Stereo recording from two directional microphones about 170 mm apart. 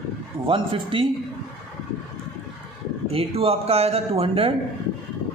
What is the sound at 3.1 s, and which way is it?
Speech, 35° right (ahead or behind).